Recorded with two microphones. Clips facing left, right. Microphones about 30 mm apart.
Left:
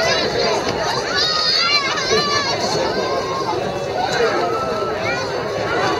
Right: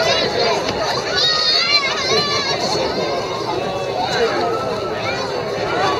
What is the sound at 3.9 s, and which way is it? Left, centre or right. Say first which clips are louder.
Run: left 1 dB; centre.